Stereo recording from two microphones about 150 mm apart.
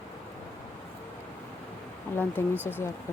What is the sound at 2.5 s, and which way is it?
Speech, 15° right (ahead or behind).